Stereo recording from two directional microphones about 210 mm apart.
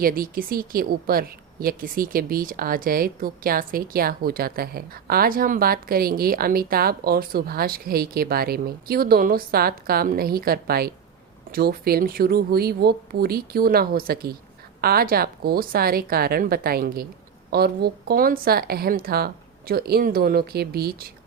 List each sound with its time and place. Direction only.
0.0 s speech: 45° right (ahead or behind)